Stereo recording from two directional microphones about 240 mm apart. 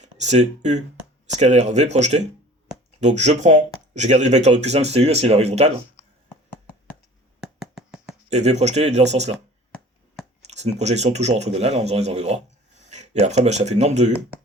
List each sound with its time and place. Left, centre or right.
0.0 s speech: right
7.4 s a sound: centre
8.3 s speech: right
10.4 s speech: right